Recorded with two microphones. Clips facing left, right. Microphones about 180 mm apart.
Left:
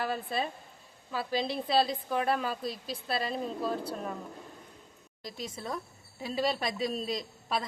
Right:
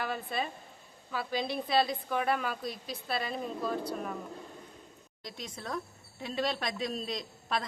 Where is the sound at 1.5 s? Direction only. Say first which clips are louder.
Even; 30° left (ahead or behind).